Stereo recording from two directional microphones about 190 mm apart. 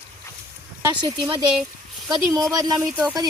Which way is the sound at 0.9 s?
20° right (ahead or behind).